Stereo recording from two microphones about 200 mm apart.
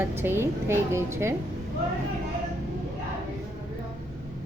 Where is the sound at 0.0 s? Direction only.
10° right (ahead or behind).